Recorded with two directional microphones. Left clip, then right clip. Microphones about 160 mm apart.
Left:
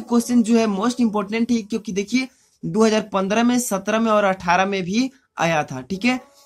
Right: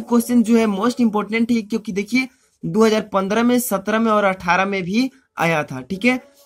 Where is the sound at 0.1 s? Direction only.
35° right (ahead or behind).